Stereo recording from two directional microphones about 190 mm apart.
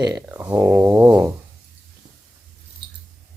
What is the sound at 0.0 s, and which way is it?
Speech, 20° right (ahead or behind).